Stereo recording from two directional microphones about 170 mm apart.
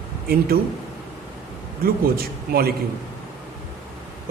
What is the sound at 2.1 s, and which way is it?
Speech, 65° right (ahead or behind).